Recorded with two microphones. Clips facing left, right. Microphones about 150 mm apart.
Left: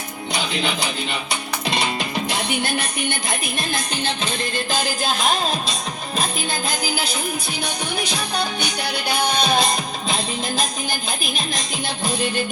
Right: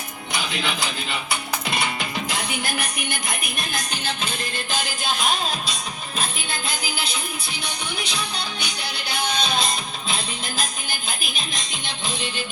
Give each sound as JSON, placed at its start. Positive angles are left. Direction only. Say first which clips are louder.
{"t": 0.3, "sound": "speech", "louder": "left 3 dB", "side_deg": 25}
{"t": 1.6, "sound": "music", "louder": "left 6 dB", "side_deg": 25}
{"t": 9.3, "sound": "music", "louder": "left 4 dB", "side_deg": 55}